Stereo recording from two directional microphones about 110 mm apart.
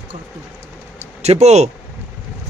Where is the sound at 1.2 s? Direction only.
80° right.